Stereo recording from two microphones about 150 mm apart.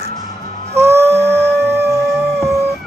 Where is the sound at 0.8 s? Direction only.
15° right (ahead or behind).